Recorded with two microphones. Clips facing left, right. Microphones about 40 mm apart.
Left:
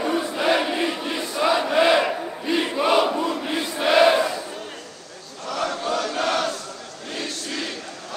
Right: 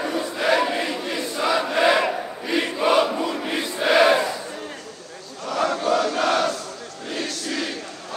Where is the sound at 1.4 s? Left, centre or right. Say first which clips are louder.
Left 1 dB; centre.